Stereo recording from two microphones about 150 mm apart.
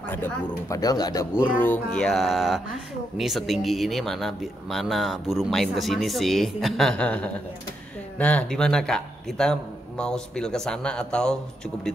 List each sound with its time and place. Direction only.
0.0 s speech: 15° left (ahead or behind)
1.4 s speech: 10° left (ahead or behind)